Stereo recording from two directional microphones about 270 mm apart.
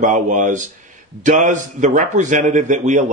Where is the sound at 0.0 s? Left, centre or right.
Right.